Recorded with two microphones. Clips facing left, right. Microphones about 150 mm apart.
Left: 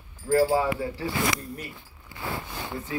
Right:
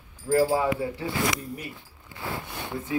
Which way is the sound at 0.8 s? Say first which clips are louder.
Even; 20° right (ahead or behind).